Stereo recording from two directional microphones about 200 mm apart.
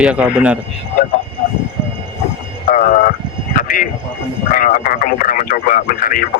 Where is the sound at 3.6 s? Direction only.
45° left (ahead or behind).